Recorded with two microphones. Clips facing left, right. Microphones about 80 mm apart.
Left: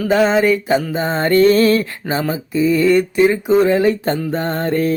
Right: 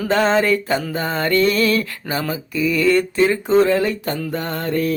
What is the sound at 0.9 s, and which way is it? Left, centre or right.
Mantra, left.